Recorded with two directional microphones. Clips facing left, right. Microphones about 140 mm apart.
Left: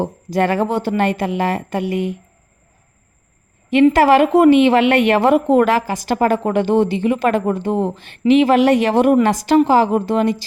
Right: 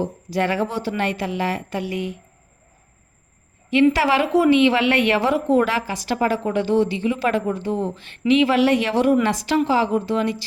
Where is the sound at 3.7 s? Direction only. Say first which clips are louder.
Left 5 dB; 50° left (ahead or behind).